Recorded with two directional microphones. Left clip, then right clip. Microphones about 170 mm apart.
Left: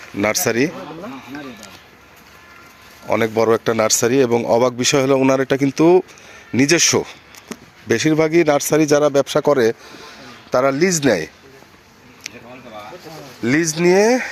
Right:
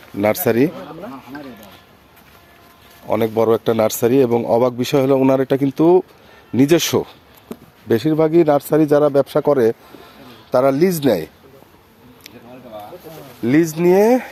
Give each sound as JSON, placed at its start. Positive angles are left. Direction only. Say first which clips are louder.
{"t": 0.4, "sound": "speech", "louder": "right 4 dB", "side_deg": -10}
{"t": 3.1, "sound": "speech", "louder": "even", "side_deg": -10}
{"t": 13.4, "sound": "speech", "louder": "right 1 dB", "side_deg": -20}